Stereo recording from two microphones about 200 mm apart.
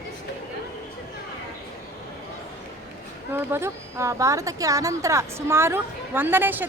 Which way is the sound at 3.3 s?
10° right (ahead or behind).